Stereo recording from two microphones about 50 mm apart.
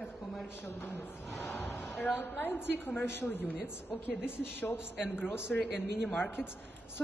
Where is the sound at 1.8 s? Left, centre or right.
Left.